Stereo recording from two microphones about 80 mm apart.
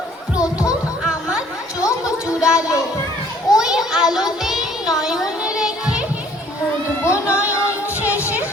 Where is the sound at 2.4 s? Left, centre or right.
Centre.